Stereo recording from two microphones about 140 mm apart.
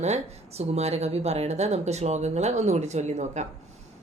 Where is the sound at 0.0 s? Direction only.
50° right (ahead or behind).